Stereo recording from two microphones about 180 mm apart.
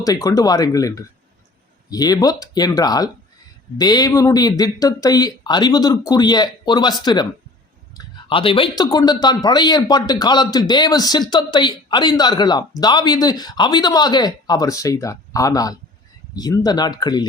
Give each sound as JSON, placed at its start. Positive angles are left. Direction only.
{"t": 0.0, "sound": "a man's voice", "side_deg": 20}